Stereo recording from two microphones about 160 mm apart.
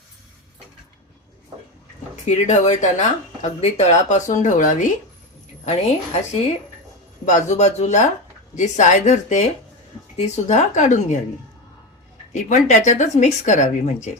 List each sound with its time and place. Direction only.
2.2 s speech: 45° left (ahead or behind)
7.3 s speech: 50° left (ahead or behind)
12.3 s speech: 50° left (ahead or behind)